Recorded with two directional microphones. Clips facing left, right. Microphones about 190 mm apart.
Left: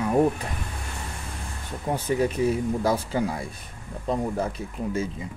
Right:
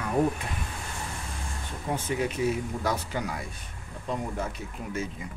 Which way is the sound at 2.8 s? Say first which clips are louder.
Left 6 dB; 30° left (ahead or behind).